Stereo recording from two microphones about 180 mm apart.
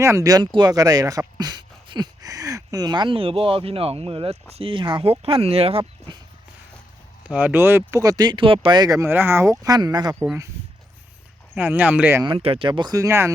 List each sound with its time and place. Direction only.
0.0 s speech: 15° right (ahead or behind); by 6.1 s 30° right (ahead or behind)
7.3 s speech: 10° right (ahead or behind)
11.5 s speech: 10° right (ahead or behind)
12.2 s speech: 30° right (ahead or behind)